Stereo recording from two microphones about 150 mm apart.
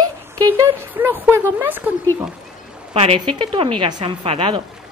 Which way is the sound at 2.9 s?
40° right (ahead or behind).